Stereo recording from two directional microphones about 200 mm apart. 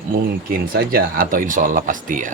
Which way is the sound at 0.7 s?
45° right (ahead or behind).